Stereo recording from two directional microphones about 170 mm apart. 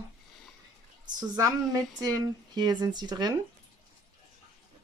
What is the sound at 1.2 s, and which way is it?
Speech, 20° right (ahead or behind).